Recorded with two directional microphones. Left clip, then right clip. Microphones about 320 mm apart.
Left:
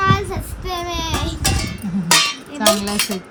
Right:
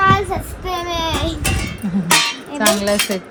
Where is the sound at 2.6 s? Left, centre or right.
Centre.